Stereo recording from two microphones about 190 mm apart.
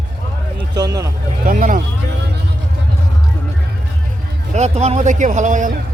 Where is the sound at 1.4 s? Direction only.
45° right (ahead or behind).